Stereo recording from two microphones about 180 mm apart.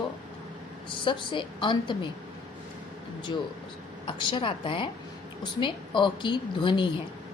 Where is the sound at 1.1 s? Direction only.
25° left (ahead or behind).